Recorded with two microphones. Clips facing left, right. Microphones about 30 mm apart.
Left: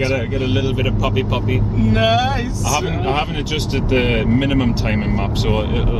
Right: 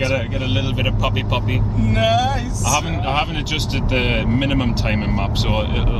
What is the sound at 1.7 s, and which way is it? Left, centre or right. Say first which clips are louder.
Speech: left 1 dB; centre.